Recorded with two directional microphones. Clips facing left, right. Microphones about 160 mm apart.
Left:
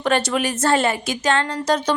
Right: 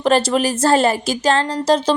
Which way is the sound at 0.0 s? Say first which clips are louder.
Right 4 dB; 30° right (ahead or behind).